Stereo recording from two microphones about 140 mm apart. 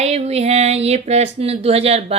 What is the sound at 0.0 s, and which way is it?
A woman's voice, 50° right (ahead or behind).